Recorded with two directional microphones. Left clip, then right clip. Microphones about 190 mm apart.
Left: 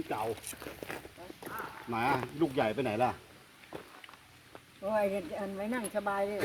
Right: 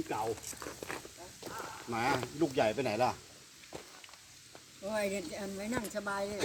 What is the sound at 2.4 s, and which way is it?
Speech, 50° left (ahead or behind).